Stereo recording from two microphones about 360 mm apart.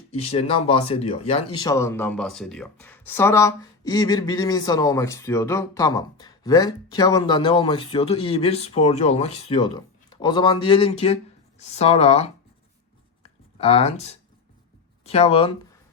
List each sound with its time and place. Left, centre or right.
0.1 s speech: centre
13.6 s speech: centre